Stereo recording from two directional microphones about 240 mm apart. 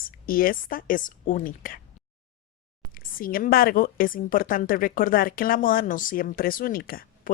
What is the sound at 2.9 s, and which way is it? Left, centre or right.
A woman's voice, left.